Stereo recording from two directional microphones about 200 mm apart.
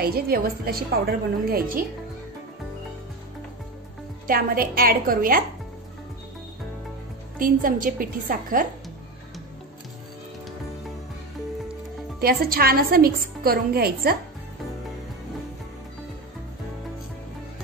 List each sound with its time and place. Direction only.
0.0 s a woman's voice: 50° right (ahead or behind)
4.3 s a woman's voice: 45° right (ahead or behind)
7.3 s a woman's voice: 45° right (ahead or behind)
12.2 s a woman's voice: 50° right (ahead or behind)